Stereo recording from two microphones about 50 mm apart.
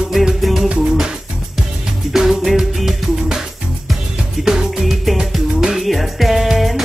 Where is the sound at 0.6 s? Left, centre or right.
Centre.